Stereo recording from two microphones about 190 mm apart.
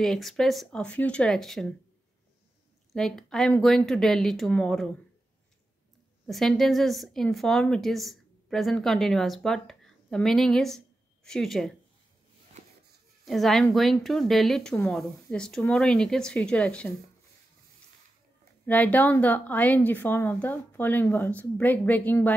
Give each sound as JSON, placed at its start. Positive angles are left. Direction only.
{"t": 0.0, "sound": "a woman's voice", "side_deg": 0}
{"t": 2.9, "sound": "a woman's voice", "side_deg": 0}
{"t": 6.2, "sound": "a woman's voice", "side_deg": 0}
{"t": 12.6, "sound": "a sound", "side_deg": -35}
{"t": 13.2, "sound": "a woman's voice", "side_deg": 0}
{"t": 18.7, "sound": "a woman's voice", "side_deg": 10}